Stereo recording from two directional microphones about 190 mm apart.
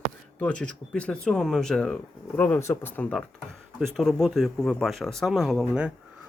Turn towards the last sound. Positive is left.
turn(degrees=-5)  # may be behind; listen again after turning